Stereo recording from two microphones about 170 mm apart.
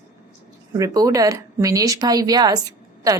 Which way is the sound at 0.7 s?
20° right (ahead or behind).